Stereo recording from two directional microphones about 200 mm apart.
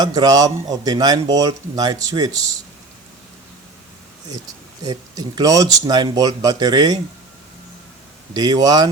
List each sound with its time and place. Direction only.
0.0 s speech: 20° right (ahead or behind)
4.8 s speech: 20° right (ahead or behind)
8.3 s speech: 20° right (ahead or behind)